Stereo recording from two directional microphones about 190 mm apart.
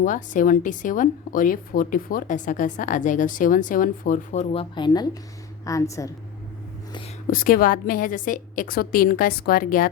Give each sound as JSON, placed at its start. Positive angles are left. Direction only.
{"t": 0.0, "sound": "a woman's voice", "side_deg": 45}
{"t": 4.7, "sound": "a woman's voice", "side_deg": 25}
{"t": 7.3, "sound": "a woman's voice", "side_deg": 45}